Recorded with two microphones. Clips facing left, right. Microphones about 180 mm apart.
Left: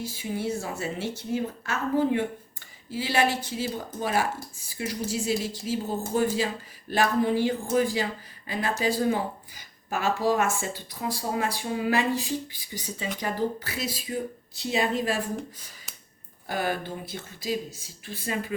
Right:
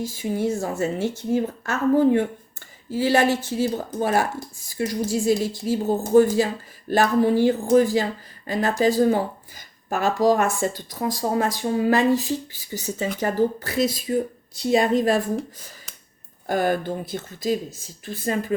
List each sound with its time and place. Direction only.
0.0 s speech: 45° right (ahead or behind)
16.5 s speech: 45° right (ahead or behind)